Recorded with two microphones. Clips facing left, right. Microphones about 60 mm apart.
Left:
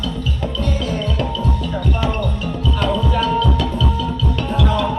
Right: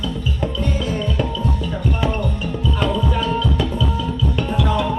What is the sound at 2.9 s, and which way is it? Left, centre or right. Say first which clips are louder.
Music: left 3 dB; centre.